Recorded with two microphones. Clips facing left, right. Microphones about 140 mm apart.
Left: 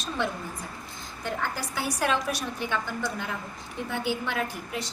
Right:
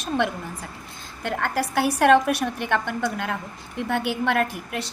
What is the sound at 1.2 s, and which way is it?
A woman's voice, 70° right (ahead or behind).